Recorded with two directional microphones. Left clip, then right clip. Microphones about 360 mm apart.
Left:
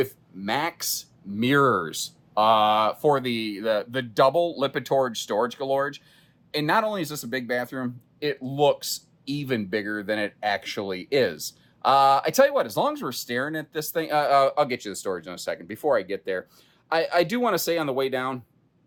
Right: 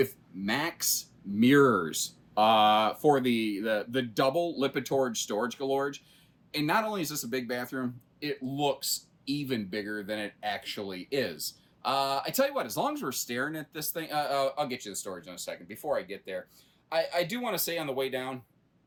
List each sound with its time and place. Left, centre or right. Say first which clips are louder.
0.0 s speech: left 2 dB; centre